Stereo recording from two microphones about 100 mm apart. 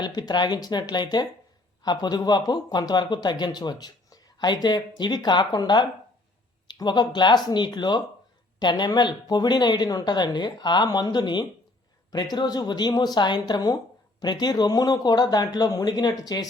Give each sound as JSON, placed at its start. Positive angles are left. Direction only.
{"t": 0.0, "sound": "speech", "side_deg": 45}